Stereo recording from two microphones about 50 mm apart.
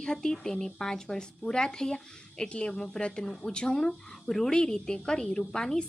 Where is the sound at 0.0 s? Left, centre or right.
Centre.